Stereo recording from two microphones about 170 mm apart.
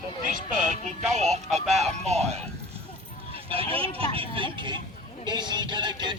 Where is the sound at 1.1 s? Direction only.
40° right (ahead or behind).